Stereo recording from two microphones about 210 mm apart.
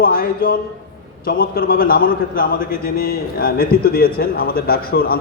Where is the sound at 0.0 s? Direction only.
45° left (ahead or behind).